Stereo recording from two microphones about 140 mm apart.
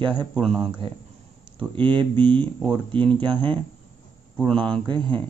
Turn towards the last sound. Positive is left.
turn(degrees=-35)  # may be behind; listen again after turning